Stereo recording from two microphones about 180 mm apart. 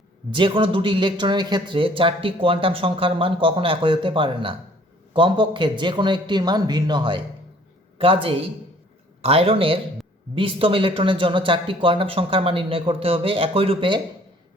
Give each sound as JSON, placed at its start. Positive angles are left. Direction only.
{"t": 0.3, "sound": "a man's voice", "side_deg": -30}